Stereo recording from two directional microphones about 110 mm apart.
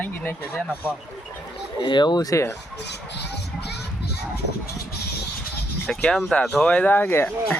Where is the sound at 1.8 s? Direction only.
45° left (ahead or behind).